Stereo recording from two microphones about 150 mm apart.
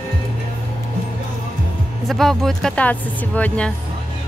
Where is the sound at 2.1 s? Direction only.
Centre (ahead or behind).